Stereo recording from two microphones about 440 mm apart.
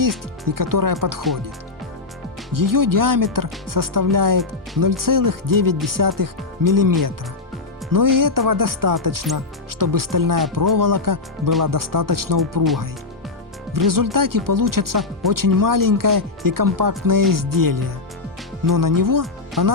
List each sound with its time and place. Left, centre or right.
0.0 s speech: right
2.5 s speech: right
7.9 s speech: right
13.7 s speech: right